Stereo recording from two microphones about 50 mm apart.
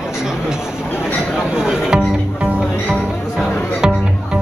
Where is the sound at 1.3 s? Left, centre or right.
Centre.